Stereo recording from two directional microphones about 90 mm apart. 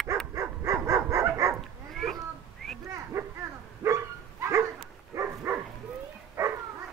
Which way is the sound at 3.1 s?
35° right (ahead or behind).